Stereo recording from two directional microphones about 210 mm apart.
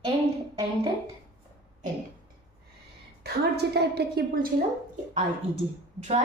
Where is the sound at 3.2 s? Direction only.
50° right (ahead or behind).